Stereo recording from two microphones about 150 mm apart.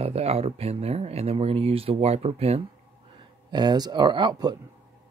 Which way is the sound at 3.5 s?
30° right (ahead or behind).